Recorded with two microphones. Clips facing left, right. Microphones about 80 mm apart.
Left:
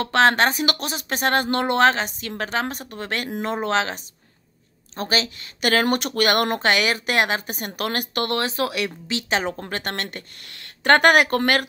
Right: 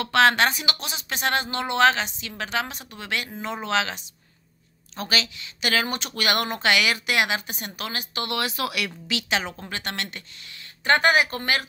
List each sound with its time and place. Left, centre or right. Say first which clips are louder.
0.0 s speech: left 2 dB; left
3.3 s speech: left 6 dB; left
3.5 s speech: left 2 dB; left
8.4 s speech: left 3 dB; left